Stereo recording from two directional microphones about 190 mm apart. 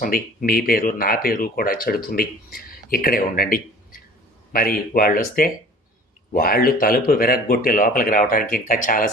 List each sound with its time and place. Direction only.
0.0 s speech: 50° left (ahead or behind)